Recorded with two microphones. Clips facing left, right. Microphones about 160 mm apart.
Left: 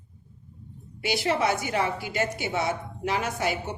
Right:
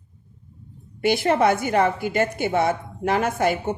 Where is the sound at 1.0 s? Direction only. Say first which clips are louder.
Right 7 dB; 55° right (ahead or behind).